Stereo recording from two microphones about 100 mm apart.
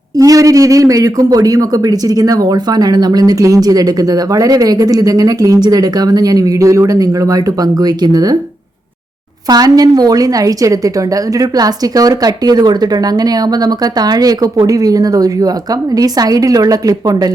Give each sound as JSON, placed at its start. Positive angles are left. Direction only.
{"t": 0.2, "sound": "a man's voice", "side_deg": -35}
{"t": 9.5, "sound": "a man's voice", "side_deg": -40}